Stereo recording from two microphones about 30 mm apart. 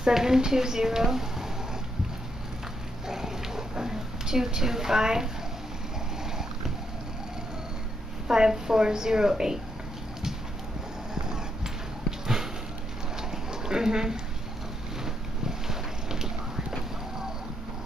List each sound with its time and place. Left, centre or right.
0.1 s a woman's voice: centre
3.1 s a sound: centre
8.3 s a woman's voice: right
11.1 s a sound: right
13.3 s dog: right
15.4 s boat: centre